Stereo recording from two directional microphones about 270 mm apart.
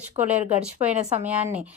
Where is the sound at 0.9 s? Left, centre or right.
Right.